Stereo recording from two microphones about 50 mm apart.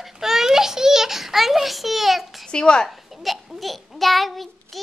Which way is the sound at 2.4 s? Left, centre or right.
Centre.